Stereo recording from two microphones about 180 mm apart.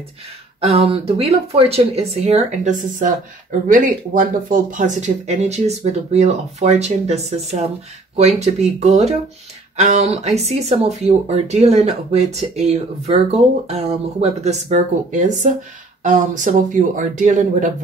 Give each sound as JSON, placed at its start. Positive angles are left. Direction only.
{"t": 0.6, "sound": "speech", "side_deg": -35}